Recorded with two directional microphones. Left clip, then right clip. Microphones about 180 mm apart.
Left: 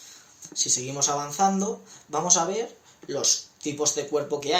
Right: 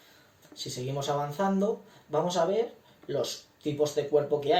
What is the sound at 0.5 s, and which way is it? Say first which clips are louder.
Speech: left 7 dB; 10° left (ahead or behind).